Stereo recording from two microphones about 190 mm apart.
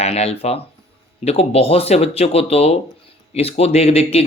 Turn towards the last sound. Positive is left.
turn(degrees=30)  # may be behind; listen again after turning